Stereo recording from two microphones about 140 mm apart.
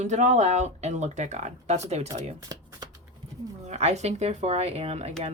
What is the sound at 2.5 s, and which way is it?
Shuffling cards, 25° right (ahead or behind).